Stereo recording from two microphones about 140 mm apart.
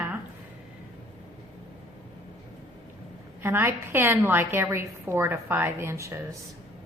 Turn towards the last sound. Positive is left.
turn(degrees=-20)  # may be behind; listen again after turning